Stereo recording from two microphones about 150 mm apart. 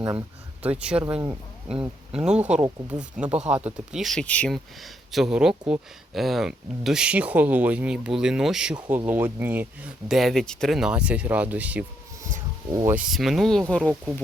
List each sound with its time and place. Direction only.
0.1 s speech: 10° right (ahead or behind)
2.2 s speech: 5° right (ahead or behind)
2.6 s speech: 25° right (ahead or behind)
3.0 s speech: 5° right (ahead or behind)
13.0 s speech: centre (ahead or behind)
13.8 s speech: 10° right (ahead or behind)